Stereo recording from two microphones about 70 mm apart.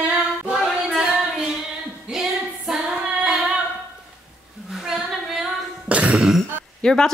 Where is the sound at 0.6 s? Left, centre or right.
Centre.